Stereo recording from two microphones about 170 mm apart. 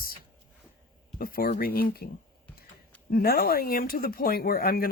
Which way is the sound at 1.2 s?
60° left (ahead or behind).